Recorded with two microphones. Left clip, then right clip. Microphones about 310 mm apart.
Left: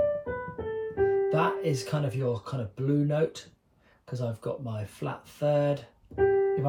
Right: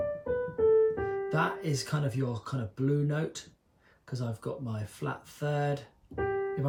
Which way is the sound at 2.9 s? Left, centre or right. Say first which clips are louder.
Left 9 dB; centre.